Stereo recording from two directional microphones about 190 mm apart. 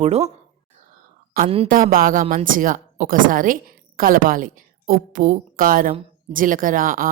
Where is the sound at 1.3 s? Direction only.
50° right (ahead or behind).